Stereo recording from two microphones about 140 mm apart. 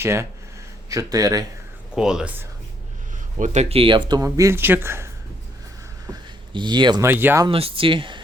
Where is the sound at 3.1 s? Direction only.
60° right (ahead or behind).